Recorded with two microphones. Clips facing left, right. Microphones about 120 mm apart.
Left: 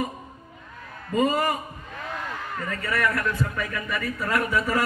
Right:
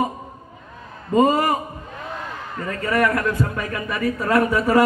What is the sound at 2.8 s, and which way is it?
A man's voice, 45° right (ahead or behind).